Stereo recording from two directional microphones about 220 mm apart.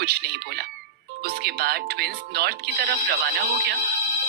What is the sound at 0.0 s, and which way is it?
Speech, 45° right (ahead or behind).